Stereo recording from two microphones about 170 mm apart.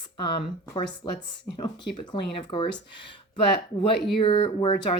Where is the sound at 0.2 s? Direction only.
30° left (ahead or behind).